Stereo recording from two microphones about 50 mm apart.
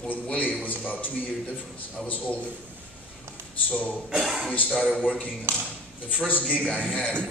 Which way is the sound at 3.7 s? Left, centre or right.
Left.